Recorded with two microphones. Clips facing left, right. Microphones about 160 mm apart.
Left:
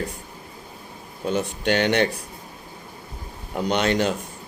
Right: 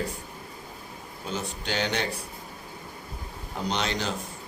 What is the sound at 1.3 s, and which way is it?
Speech, 60° left (ahead or behind).